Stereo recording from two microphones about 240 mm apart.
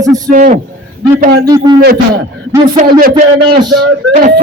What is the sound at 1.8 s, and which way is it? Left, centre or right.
Speech, right.